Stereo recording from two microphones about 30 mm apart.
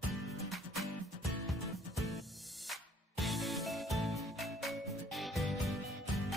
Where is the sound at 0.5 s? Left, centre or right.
Centre.